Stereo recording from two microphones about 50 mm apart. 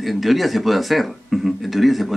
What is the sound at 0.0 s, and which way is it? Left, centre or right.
Speech, centre.